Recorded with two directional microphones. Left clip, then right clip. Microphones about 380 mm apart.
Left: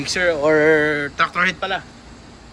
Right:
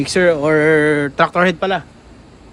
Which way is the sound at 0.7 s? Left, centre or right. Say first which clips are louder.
Right 3 dB; right.